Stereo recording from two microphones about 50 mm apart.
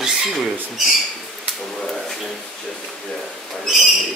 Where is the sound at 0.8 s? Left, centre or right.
Centre.